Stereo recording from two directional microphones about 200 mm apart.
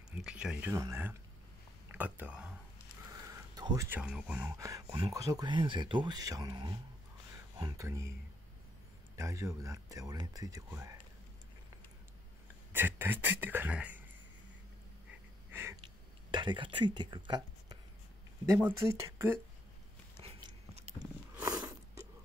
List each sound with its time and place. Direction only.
0.1 s speech: 5° right (ahead or behind)
3.1 s a sound: 15° right (ahead or behind)
4.0 s speech: 5° right (ahead or behind)
9.1 s speech: 15° right (ahead or behind)
12.7 s speech: 10° right (ahead or behind)
15.0 s wheeze: 10° right (ahead or behind)
16.3 s speech: 25° right (ahead or behind)
20.2 s a sound: 30° right (ahead or behind)
21.4 s a sound: 15° right (ahead or behind)